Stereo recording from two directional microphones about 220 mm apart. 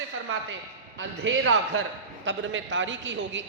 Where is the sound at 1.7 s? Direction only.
90° right.